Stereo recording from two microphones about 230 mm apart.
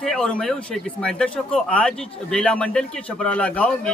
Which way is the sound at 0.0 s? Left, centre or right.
Centre.